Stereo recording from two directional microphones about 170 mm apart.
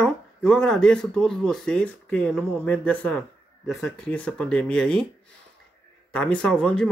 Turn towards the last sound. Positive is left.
turn(degrees=5)  # may be behind; listen again after turning